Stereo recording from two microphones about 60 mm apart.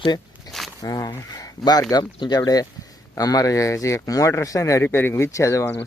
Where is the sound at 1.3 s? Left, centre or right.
Left.